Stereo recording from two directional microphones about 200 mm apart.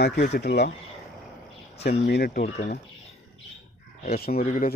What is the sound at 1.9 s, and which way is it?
Speech, 50° left (ahead or behind).